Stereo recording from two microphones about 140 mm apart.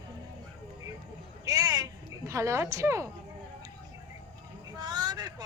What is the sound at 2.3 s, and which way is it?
Speech, 20° right (ahead or behind).